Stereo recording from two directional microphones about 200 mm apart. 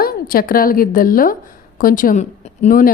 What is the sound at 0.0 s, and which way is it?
A woman's voice, 45° left (ahead or behind).